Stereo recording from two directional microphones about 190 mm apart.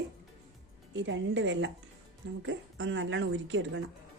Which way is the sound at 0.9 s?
75° right (ahead or behind).